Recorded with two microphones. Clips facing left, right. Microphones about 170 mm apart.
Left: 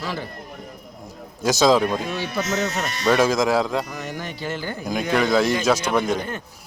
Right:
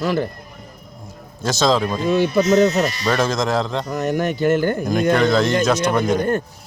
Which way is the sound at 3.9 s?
50° right (ahead or behind).